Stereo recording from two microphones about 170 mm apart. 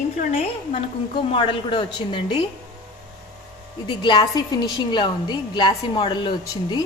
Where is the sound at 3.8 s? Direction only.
30° left (ahead or behind).